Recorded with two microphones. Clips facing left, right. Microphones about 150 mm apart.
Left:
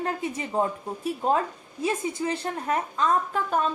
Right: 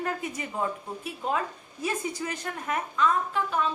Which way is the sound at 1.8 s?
25° left (ahead or behind).